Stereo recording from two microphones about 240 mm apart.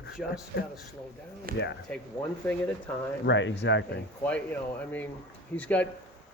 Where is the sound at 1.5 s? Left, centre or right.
Right.